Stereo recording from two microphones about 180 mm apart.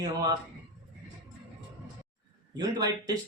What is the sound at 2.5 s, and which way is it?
Speech, 20° right (ahead or behind).